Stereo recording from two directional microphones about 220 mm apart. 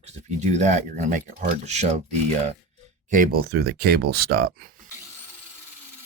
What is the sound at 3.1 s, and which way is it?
Speech, 40° right (ahead or behind).